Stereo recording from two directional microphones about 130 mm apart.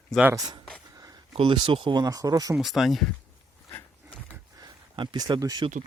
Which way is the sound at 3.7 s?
10° left (ahead or behind).